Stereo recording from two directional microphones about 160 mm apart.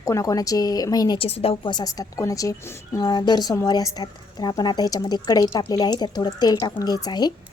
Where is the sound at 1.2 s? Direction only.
40° left (ahead or behind).